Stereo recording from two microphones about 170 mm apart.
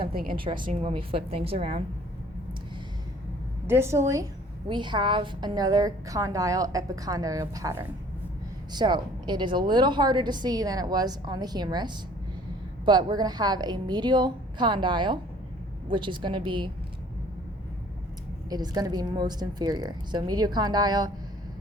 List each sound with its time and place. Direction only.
0.0 s a woman's voice: 60° right (ahead or behind)
0.3 s a woman's voice: 30° right (ahead or behind)
3.7 s a woman's voice: 15° right (ahead or behind)
18.4 s a woman's voice: 20° right (ahead or behind)